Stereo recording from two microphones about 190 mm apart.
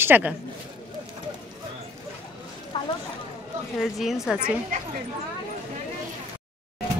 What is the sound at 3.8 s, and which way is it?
Speech, centre (ahead or behind).